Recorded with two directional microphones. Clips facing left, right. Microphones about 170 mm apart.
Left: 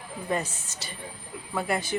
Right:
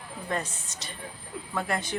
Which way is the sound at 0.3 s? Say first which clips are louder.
Left 3 dB; 5° left (ahead or behind).